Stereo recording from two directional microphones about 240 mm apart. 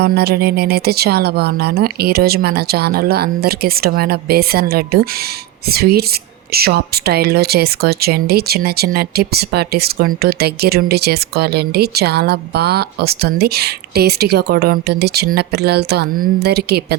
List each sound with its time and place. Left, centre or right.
0.0 s speech: right